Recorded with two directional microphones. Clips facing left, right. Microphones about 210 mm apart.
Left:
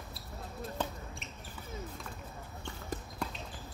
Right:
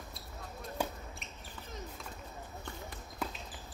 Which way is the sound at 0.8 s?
10° right (ahead or behind).